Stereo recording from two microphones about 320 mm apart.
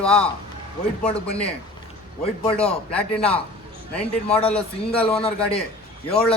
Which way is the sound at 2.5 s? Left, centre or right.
Centre.